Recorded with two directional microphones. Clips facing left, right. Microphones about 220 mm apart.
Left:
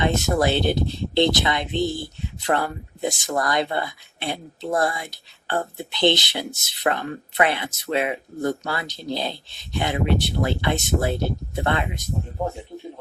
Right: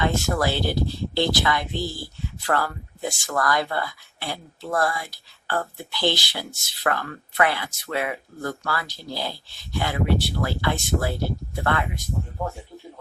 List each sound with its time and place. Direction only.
0.0 s speech: 20° left (ahead or behind)